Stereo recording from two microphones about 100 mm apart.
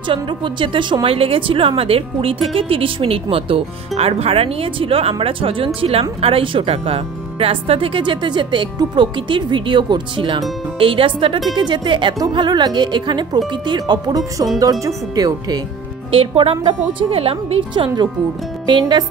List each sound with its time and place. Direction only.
0.1 s speech: 55° right (ahead or behind)
1.0 s speech: 70° right (ahead or behind)
11.5 s speech: 50° right (ahead or behind)
16.1 s speech: 65° right (ahead or behind)
18.7 s speech: 50° right (ahead or behind)